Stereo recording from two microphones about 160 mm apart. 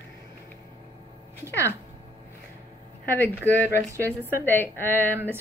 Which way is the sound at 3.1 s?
10° left (ahead or behind).